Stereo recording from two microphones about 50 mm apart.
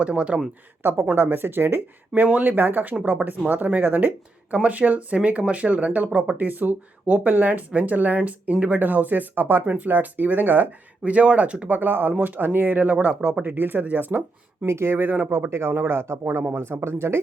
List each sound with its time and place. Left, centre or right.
0.0 s speech: right
1.1 s speech: right
2.2 s speech: right
4.5 s speech: right
11.8 s speech: right
14.7 s speech: right